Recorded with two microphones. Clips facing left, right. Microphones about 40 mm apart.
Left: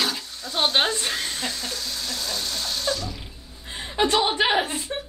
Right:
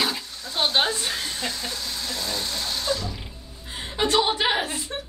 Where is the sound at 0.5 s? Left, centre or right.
Left.